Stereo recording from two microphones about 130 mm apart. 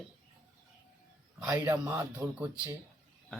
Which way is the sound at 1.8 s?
20° right (ahead or behind).